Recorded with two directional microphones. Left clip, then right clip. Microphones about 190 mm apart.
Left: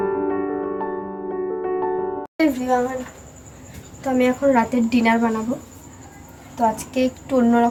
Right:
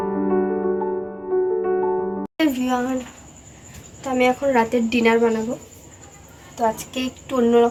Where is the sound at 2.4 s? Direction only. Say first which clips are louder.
Left 2 dB; 10° right (ahead or behind).